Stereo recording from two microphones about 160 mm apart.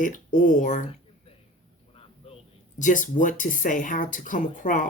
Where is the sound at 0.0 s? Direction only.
55° left (ahead or behind).